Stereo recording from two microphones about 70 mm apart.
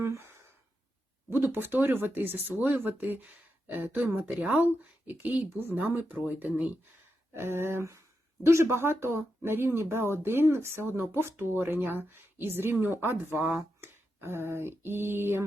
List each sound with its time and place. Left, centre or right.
0.0 s sigh: right
1.3 s speech: right
7.3 s speech: right
13.8 s a sound: right